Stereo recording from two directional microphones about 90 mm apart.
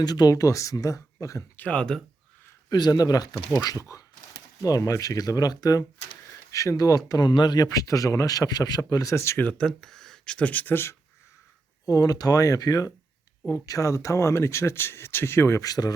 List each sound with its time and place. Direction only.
0.0 s speech: 50° left (ahead or behind)
1.5 s speech: 15° left (ahead or behind)
2.6 s speech: 45° left (ahead or behind)
7.3 s speech: 55° left (ahead or behind); by 9.4 s 30° left (ahead or behind)
9.4 s speech: 15° left (ahead or behind)
9.6 s speech: 5° left (ahead or behind); by 10.9 s 25° left (ahead or behind)
11.9 s speech: 45° left (ahead or behind); by 15.6 s 30° left (ahead or behind)
15.6 s speech: 45° left (ahead or behind)